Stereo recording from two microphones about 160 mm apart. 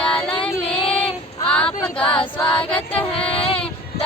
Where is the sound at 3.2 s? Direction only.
5° left (ahead or behind).